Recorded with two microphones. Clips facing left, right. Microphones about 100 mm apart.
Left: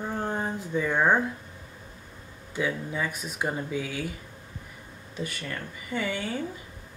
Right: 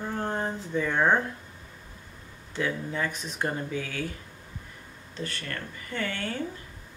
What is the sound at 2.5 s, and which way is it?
Speech, 10° left (ahead or behind).